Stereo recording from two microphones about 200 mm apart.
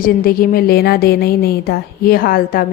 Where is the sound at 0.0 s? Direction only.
45° left (ahead or behind).